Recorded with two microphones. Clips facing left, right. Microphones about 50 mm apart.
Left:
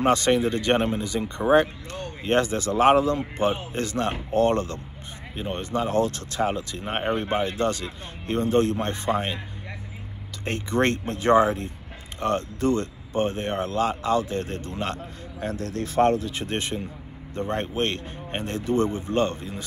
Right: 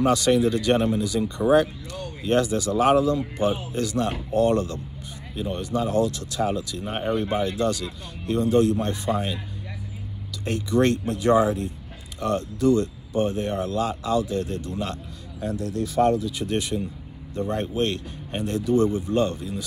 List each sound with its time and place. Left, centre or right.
0.0 s speech: left
1.9 s speech: left
10.4 s speech: left